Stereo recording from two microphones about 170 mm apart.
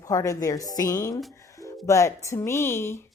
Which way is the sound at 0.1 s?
20° left (ahead or behind).